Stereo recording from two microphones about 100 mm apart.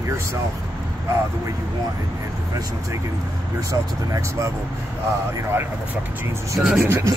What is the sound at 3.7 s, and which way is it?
Speech, 30° right (ahead or behind).